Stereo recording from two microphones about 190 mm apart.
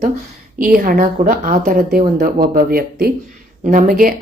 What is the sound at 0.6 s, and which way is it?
A woman's voice, 45° right (ahead or behind).